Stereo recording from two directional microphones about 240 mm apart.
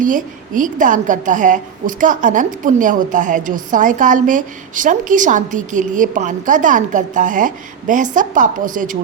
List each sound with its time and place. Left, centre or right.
0.0 s a woman's voice: right